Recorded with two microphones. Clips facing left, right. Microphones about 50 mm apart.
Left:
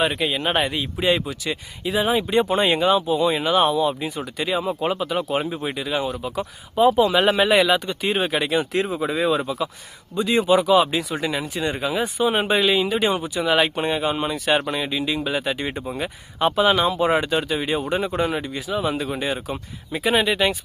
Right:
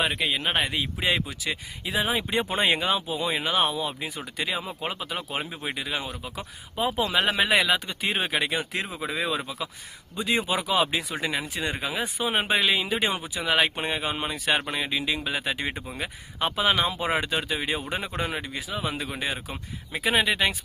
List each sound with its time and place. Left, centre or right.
0.0 s speech: centre
10.2 s speech: centre
15.9 s speech: centre